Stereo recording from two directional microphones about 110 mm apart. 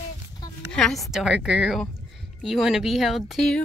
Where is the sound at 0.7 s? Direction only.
5° left (ahead or behind).